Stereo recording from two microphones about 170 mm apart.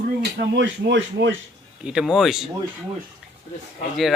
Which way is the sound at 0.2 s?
85° right.